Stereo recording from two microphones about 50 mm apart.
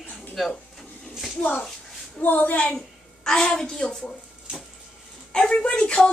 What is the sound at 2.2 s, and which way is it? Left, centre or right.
Speech, left.